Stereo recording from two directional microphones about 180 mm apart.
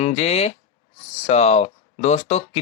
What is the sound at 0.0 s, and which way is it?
Speech, 40° left (ahead or behind).